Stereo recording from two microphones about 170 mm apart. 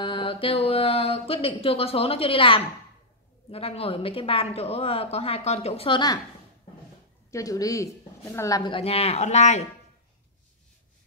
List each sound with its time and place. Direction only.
0.0 s speech: 30° left (ahead or behind)
7.2 s a woman's voice: 20° left (ahead or behind); by 9.6 s 40° left (ahead or behind)